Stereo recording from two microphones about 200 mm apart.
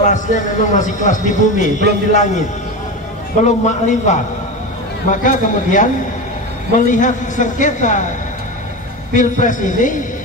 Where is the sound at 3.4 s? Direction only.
35° left (ahead or behind).